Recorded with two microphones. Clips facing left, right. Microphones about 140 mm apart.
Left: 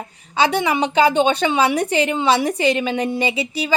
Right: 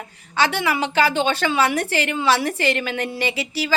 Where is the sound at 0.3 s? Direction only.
20° left (ahead or behind).